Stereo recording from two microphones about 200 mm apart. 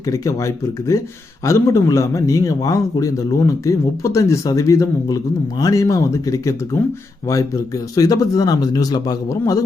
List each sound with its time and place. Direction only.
0.1 s a man's voice: 15° left (ahead or behind)